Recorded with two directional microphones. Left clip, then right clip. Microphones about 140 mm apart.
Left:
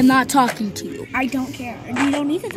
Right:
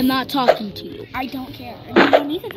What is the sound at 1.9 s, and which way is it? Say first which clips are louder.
Speech: right 8 dB; 10° left (ahead or behind).